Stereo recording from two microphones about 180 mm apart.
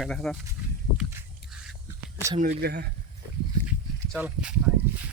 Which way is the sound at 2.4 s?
55° right (ahead or behind).